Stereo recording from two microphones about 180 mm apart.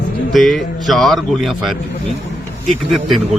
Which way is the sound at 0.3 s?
Centre (ahead or behind).